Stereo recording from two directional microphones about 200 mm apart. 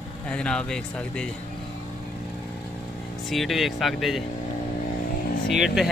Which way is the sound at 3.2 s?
Centre (ahead or behind).